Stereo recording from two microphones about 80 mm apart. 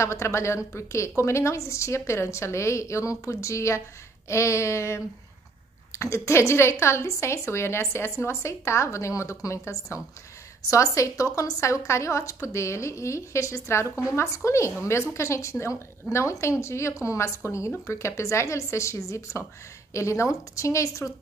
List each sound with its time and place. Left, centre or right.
0.0 s a woman's voice: left